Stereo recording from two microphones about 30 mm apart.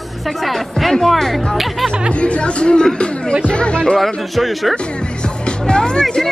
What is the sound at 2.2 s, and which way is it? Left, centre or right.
Speech, left.